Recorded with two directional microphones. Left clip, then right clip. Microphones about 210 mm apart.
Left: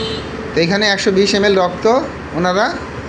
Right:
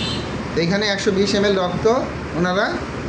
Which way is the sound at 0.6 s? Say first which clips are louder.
Left 6 dB; 35° left (ahead or behind).